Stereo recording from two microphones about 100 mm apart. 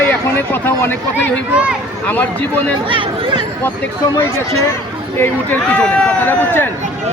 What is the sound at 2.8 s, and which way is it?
Speech, 55° right (ahead or behind).